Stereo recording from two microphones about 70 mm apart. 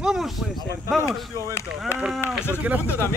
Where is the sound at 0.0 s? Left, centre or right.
Centre.